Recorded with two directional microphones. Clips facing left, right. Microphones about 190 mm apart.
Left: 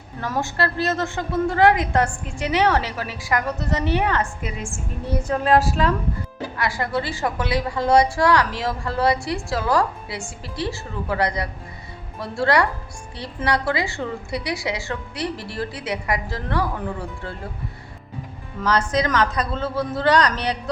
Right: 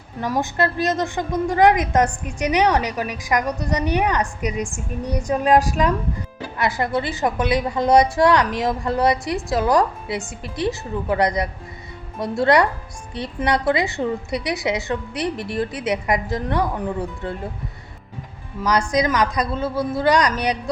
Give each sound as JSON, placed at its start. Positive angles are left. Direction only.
{"t": 0.2, "sound": "a woman's voice", "side_deg": -15}
{"t": 18.6, "sound": "a woman's voice", "side_deg": -15}